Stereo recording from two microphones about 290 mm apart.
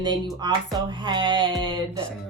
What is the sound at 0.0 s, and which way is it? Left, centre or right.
A woman's voice, centre.